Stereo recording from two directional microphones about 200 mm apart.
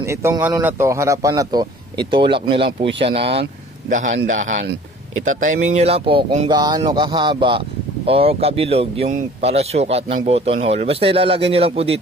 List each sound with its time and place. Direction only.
0.0 s speech: 15° right (ahead or behind)
3.9 s a man's voice: 40° right (ahead or behind)
5.8 s speech: 30° right (ahead or behind)